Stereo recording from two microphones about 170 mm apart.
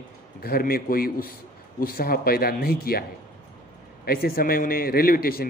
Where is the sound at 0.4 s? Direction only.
60° left (ahead or behind).